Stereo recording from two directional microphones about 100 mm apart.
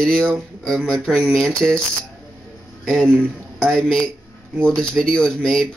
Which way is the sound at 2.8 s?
5° left (ahead or behind).